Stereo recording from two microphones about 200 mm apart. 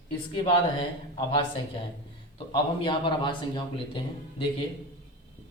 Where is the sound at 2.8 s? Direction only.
25° left (ahead or behind).